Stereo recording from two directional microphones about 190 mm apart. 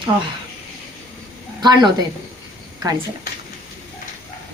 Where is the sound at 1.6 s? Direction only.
20° right (ahead or behind).